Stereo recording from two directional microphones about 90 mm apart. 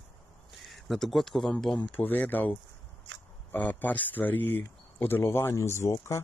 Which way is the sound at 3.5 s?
20° left (ahead or behind).